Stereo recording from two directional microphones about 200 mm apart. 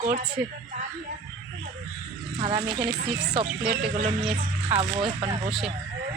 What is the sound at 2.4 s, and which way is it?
Speech, 30° right (ahead or behind).